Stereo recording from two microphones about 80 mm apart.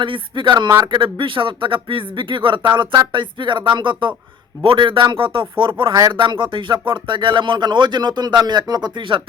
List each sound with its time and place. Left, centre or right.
0.0 s speech: right